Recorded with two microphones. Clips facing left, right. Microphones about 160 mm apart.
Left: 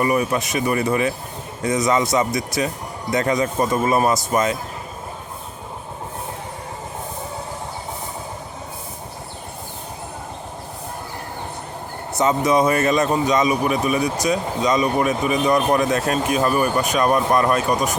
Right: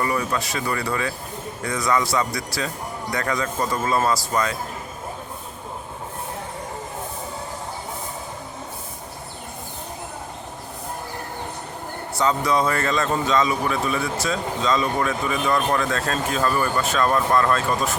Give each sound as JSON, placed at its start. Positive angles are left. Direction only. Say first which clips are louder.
{"t": 0.0, "sound": "a man's voice", "louder": "left 4 dB", "side_deg": 20}
{"t": 12.1, "sound": "a man's voice", "louder": "left 4 dB", "side_deg": 20}